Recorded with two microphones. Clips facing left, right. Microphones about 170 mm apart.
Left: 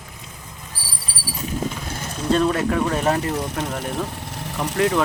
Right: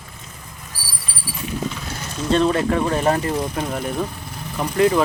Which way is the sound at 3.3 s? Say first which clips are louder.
Right 2 dB; 75° left (ahead or behind).